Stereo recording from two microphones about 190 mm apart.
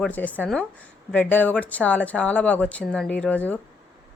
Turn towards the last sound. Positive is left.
turn(degrees=10)  # may be behind; listen again after turning